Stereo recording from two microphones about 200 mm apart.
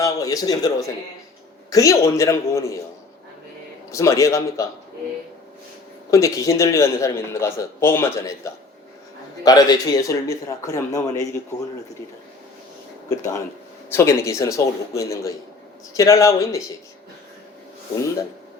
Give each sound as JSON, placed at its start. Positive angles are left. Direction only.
{"t": 0.0, "sound": "a man's voice", "side_deg": 15}
{"t": 3.9, "sound": "a man's voice", "side_deg": 15}
{"t": 6.1, "sound": "a man's voice", "side_deg": 15}
{"t": 9.4, "sound": "a man's voice", "side_deg": 20}
{"t": 13.9, "sound": "a man's voice", "side_deg": 15}